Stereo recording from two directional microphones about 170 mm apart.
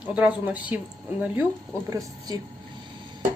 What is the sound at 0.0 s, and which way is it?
Speech, 10° right (ahead or behind).